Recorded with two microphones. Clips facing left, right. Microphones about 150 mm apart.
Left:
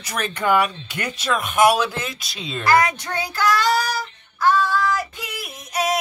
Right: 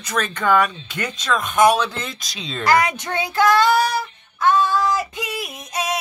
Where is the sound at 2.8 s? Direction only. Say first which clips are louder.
Even; 20° right (ahead or behind).